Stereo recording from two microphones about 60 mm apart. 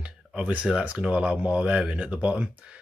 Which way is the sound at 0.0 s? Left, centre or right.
Right.